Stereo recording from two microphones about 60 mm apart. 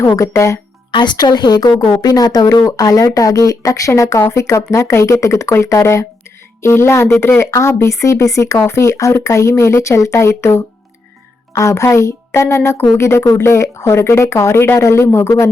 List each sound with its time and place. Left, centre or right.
0.2 s speech: left
1.6 s speech: left
4.2 s speech: left
6.6 s speech: left
11.7 s speech: left